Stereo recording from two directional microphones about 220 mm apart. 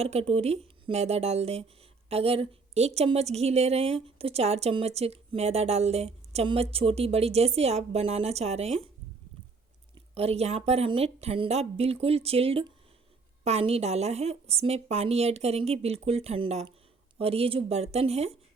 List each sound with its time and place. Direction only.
0.0 s a woman's voice: 30° right (ahead or behind)
9.9 s a woman's voice: 25° right (ahead or behind)